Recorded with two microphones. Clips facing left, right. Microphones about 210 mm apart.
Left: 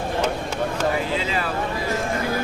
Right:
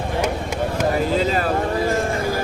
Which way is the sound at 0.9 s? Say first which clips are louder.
Right 5 dB; 40° right (ahead or behind).